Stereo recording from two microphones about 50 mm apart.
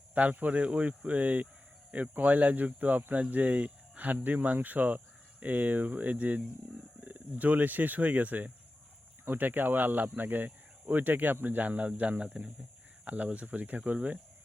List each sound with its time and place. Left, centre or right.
0.1 s speech: right